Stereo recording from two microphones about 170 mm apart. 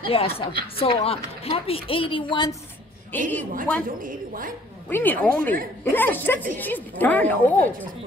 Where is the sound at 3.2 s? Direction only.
50° right (ahead or behind).